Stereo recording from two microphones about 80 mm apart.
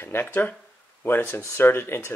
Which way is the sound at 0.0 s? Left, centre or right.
Left.